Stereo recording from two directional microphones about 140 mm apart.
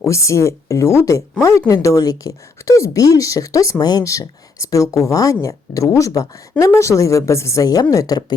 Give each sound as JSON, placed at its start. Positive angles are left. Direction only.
{"t": 0.1, "sound": "speech", "side_deg": 20}